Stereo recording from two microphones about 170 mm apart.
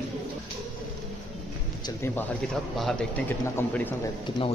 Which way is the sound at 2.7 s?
Centre (ahead or behind).